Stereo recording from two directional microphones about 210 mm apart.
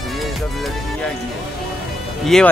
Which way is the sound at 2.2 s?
Centre (ahead or behind).